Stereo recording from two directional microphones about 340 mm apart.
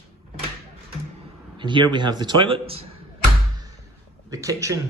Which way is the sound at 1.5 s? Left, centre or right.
Centre.